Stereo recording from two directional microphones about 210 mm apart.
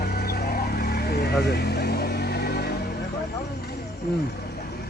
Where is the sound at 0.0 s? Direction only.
50° left (ahead or behind).